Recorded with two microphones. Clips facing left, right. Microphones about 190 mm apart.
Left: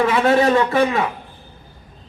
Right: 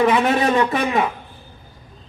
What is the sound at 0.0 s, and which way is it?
A man's voice, 15° right (ahead or behind).